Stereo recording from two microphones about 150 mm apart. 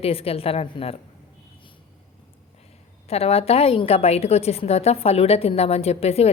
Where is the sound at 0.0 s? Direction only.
40° left (ahead or behind).